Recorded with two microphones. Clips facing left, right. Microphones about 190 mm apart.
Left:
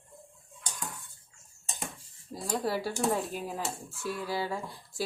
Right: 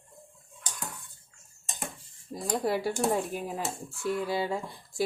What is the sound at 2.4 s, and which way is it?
Speech, 20° right (ahead or behind).